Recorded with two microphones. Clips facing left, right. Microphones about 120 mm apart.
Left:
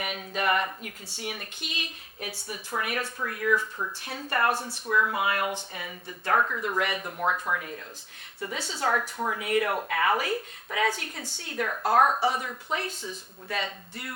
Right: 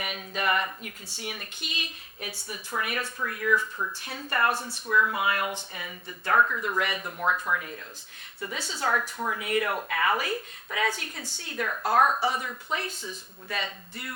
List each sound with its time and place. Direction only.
0.0 s speech: 50° left (ahead or behind); by 3.9 s 35° left (ahead or behind)
4.0 s speech: 45° left (ahead or behind)
7.2 s speech: 35° left (ahead or behind)
8.6 s speech: 60° left (ahead or behind)
8.9 s speech: 35° left (ahead or behind)
9.4 s speech: 50° left (ahead or behind)
11.3 s a woman's voice: 70° left (ahead or behind)
11.5 s speech: 40° left (ahead or behind)